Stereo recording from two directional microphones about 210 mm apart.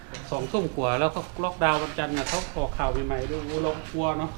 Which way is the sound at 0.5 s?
20° right (ahead or behind).